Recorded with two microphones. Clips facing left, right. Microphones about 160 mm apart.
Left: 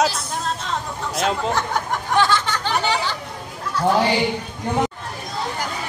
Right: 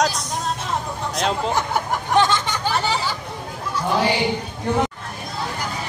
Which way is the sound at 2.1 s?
20° right (ahead or behind).